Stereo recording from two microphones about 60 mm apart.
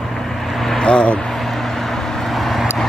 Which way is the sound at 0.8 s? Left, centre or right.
Centre.